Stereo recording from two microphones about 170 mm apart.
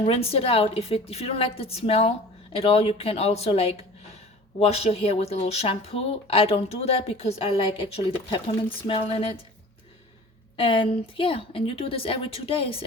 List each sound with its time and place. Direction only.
0.0 s speech: 35° left (ahead or behind)
10.6 s speech: 30° left (ahead or behind)